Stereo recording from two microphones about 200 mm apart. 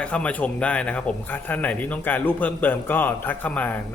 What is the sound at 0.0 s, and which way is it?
Speech, 5° left (ahead or behind).